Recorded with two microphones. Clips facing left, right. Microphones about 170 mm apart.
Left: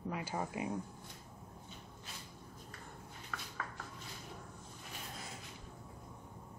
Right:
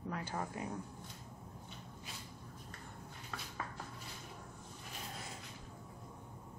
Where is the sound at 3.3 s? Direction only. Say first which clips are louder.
Even; 25° right (ahead or behind).